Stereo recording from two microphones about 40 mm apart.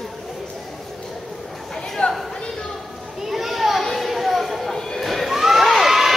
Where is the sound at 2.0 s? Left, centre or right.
Left.